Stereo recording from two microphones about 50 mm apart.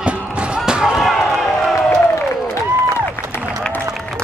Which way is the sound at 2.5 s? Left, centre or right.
Left.